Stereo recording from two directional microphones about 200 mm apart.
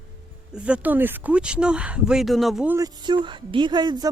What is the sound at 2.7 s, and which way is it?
Speech, 20° right (ahead or behind).